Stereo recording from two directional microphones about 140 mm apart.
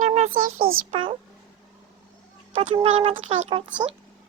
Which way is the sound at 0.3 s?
90° right.